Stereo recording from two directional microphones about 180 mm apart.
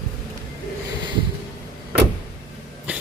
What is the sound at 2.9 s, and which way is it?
Throat clearing, 10° right (ahead or behind).